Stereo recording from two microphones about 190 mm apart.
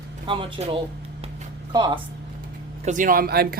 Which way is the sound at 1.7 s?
25° right (ahead or behind).